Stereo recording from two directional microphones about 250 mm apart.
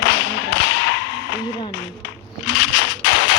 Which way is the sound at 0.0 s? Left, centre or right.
Left.